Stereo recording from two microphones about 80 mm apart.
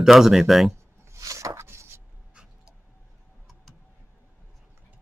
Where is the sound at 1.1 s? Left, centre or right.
Right.